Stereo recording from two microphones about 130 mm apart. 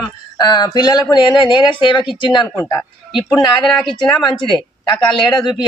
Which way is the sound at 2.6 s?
25° left (ahead or behind).